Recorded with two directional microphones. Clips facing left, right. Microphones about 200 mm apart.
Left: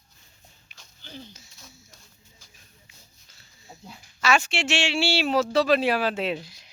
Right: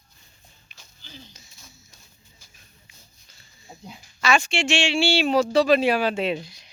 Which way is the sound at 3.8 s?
15° right (ahead or behind).